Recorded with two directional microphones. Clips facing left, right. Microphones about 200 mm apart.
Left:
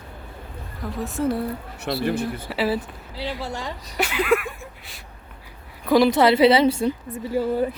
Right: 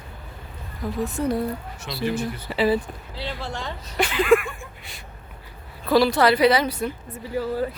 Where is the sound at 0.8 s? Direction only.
Centre (ahead or behind).